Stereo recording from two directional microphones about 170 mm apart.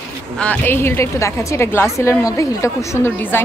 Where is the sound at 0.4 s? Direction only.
10° left (ahead or behind).